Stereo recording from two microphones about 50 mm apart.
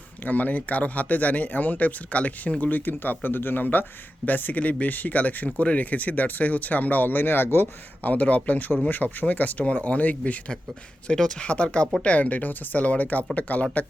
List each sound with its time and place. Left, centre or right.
0.3 s speech: left
8.1 s speech: left
11.1 s speech: centre